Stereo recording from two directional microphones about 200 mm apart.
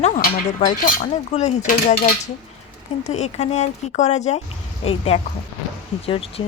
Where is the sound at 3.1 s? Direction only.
35° left (ahead or behind).